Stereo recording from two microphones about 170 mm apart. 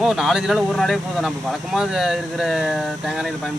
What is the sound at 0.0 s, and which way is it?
Speech, centre (ahead or behind).